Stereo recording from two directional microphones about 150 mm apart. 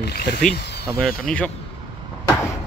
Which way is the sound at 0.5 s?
90° left.